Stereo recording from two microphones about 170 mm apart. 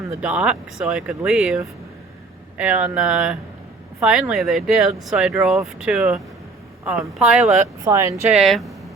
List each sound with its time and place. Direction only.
0.2 s speech: 5° right (ahead or behind)
7.9 s speech: 20° right (ahead or behind)
8.3 s speech: centre (ahead or behind)